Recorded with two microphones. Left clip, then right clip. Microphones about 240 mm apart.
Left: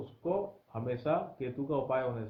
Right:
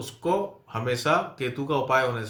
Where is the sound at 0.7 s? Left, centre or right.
Centre.